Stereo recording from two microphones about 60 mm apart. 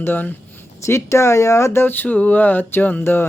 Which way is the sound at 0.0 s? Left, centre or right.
Left.